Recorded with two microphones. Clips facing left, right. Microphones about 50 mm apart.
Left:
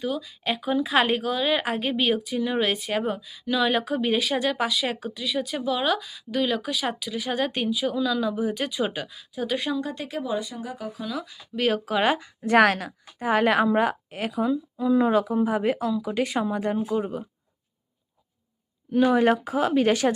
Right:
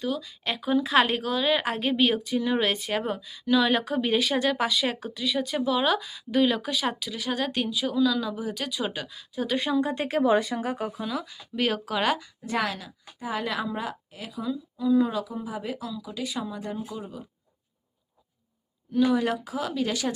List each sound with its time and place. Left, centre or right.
0.0 s speech: centre
9.7 s speech: right
10.0 s speech: right
10.3 s speech: right
11.1 s speech: centre; by 12.3 s left
12.5 s speech: left
18.9 s speech: left